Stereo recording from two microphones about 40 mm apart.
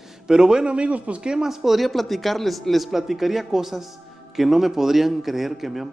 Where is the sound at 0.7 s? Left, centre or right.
Right.